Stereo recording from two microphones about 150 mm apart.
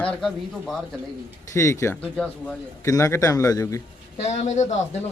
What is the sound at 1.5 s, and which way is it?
Speech, 20° left (ahead or behind).